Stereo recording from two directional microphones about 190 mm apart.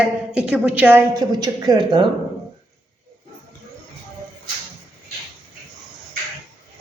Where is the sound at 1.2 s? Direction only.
20° right (ahead or behind).